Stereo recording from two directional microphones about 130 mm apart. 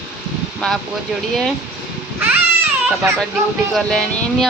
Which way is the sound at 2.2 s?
15° right (ahead or behind).